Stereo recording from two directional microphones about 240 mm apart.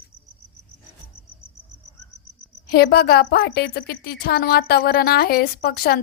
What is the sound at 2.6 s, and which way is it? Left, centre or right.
A woman's voice, left.